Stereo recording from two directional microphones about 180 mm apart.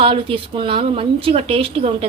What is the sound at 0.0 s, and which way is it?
Speech, 30° right (ahead or behind).